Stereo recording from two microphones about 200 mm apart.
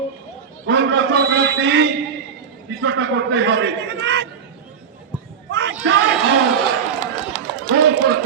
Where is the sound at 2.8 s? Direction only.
65° right (ahead or behind).